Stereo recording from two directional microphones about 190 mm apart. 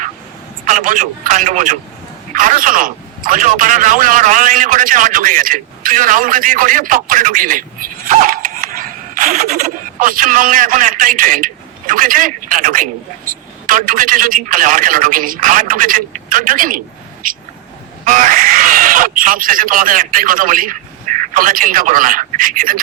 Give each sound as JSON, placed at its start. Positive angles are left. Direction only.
{"t": 0.6, "sound": "a man's voice", "side_deg": -40}
{"t": 8.0, "sound": "a sound", "side_deg": -45}
{"t": 17.2, "sound": "a man's voice", "side_deg": -45}